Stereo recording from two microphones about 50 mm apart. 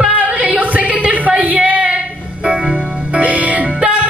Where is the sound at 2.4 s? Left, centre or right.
Right.